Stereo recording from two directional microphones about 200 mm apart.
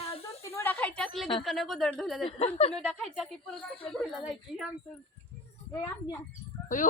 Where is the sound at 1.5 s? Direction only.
Centre (ahead or behind).